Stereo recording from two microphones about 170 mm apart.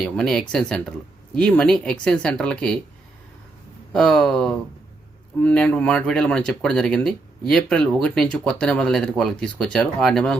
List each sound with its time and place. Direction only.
0.0 s speech: 5° left (ahead or behind)
3.9 s speech: centre (ahead or behind)